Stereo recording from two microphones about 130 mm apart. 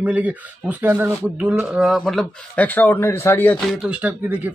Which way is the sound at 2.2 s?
15° left (ahead or behind).